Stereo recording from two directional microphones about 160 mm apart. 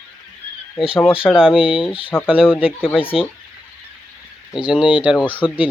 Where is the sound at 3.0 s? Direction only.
35° left (ahead or behind).